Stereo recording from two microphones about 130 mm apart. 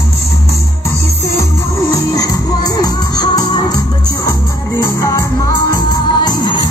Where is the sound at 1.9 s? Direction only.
25° left (ahead or behind).